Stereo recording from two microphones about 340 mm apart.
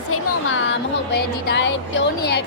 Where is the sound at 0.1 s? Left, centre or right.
Left.